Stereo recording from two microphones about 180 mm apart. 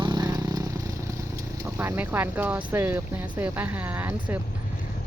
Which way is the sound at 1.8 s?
10° right (ahead or behind).